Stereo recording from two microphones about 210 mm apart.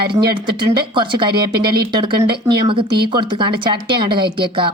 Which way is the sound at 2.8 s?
50° right (ahead or behind).